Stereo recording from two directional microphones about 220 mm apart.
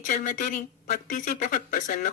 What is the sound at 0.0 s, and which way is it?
Speech, 40° left (ahead or behind).